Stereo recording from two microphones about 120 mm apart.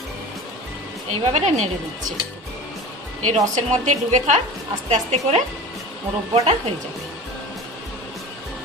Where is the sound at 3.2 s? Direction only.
75° right (ahead or behind).